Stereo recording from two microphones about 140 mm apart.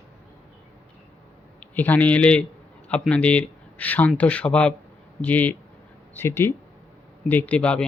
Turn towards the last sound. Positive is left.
turn(degrees=10)  # may be behind; listen again after turning